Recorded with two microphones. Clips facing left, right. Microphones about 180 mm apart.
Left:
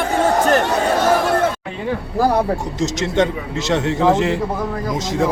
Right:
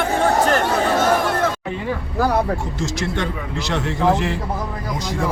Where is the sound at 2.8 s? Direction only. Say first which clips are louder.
Left 6 dB; 20° left (ahead or behind).